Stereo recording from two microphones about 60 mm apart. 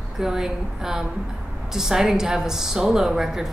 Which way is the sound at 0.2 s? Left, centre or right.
Centre.